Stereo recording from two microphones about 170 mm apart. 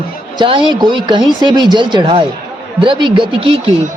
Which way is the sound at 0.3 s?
30° right (ahead or behind).